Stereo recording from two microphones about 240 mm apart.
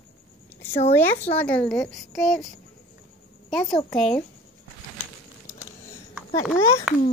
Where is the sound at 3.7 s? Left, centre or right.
Centre.